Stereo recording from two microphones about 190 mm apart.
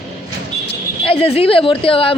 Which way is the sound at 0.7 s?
30° left (ahead or behind).